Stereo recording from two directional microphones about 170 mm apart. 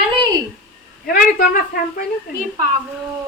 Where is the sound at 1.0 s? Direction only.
60° left (ahead or behind).